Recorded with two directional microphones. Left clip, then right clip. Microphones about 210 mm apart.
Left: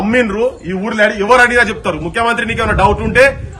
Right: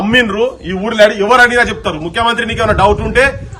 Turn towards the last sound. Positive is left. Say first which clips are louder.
# even
turn(degrees=-15)  # may be behind; listen again after turning